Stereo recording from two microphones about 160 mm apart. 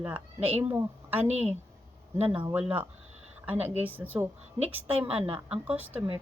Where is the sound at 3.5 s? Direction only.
40° right (ahead or behind).